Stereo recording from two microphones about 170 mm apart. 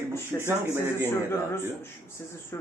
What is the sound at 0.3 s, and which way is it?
Speech, 15° left (ahead or behind).